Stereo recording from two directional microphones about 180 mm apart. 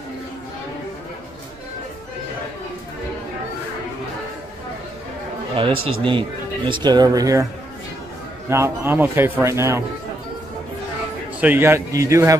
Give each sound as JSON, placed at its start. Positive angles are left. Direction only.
{"t": 5.6, "sound": "a man's voice", "side_deg": -30}
{"t": 8.5, "sound": "a man's voice", "side_deg": -15}
{"t": 11.4, "sound": "a man's voice", "side_deg": -15}